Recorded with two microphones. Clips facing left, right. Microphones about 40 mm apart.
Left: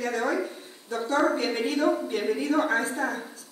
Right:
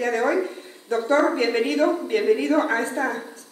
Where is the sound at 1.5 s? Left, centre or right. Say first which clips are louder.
Right 4 dB; right.